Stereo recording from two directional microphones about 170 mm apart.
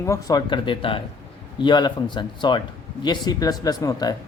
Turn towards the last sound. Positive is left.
turn(degrees=20)  # may be behind; listen again after turning